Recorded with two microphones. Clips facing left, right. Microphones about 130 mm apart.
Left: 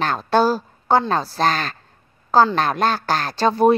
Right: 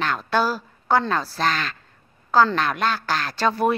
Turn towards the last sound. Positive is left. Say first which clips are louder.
# left 5 dB
turn(degrees=30)  # may be behind; listen again after turning